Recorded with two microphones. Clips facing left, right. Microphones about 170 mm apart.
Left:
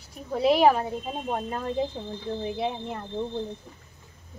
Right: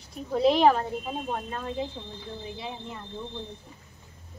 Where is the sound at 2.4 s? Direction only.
55° left (ahead or behind).